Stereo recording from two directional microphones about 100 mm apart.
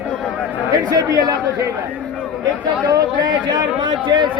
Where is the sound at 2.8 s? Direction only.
45° right (ahead or behind).